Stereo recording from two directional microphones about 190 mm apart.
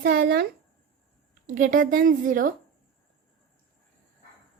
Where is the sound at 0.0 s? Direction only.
50° right (ahead or behind).